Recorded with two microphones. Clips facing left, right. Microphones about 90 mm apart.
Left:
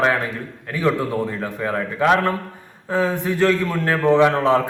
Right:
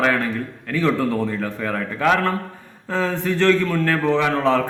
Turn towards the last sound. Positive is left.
turn(degrees=20)  # may be behind; listen again after turning